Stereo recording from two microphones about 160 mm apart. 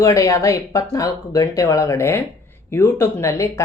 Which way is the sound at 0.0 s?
20° left (ahead or behind).